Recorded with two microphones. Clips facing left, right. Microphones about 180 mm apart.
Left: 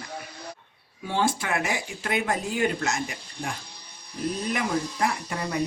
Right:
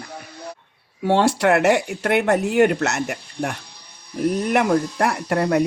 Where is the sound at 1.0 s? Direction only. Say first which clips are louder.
Right 10 dB; 70° right (ahead or behind).